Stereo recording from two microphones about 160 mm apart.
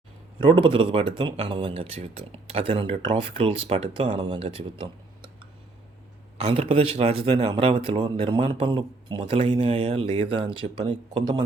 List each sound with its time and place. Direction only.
0.3 s speech: 30° right (ahead or behind)
6.3 s speech: 40° right (ahead or behind)